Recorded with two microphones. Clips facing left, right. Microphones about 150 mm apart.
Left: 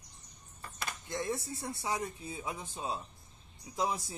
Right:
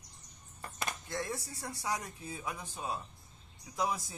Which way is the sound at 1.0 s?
20° left (ahead or behind).